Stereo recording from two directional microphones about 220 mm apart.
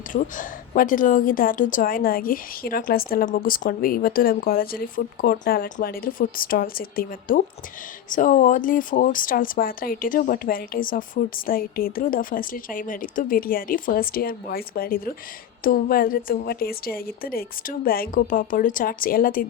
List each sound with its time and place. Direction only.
0.1 s a woman's voice: 35° left (ahead or behind)